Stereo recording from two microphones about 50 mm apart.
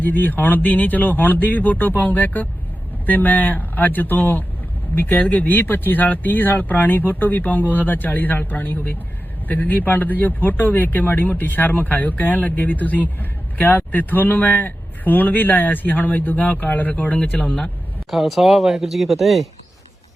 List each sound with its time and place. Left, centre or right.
0.0 s speech: left
18.1 s speech: centre